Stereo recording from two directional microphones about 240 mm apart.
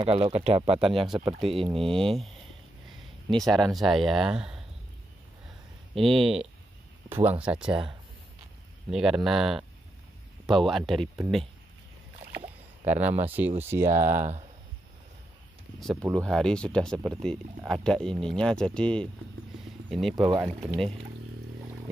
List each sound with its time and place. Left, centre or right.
0.0 s speech: right
0.9 s speech: centre
1.3 s speech: right
3.3 s speech: centre
5.9 s speech: centre
8.9 s speech: centre
12.8 s speech: centre
16.2 s speech: centre
20.2 s speech: centre
20.6 s speech: centre